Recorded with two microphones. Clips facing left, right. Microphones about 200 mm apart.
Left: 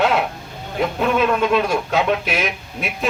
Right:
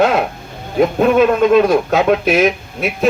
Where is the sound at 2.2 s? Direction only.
40° right (ahead or behind).